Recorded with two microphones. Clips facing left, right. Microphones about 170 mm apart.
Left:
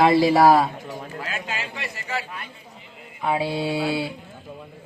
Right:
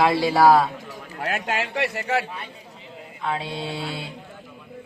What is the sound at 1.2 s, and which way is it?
A man's voice, 65° right (ahead or behind).